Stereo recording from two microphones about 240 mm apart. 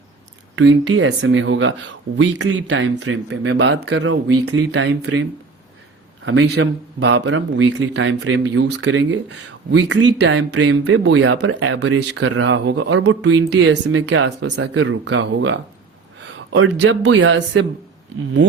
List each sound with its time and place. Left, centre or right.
0.5 s speech: right
3.9 s speech: right
6.2 s speech: right
13.5 s speech: right
14.5 s speech: right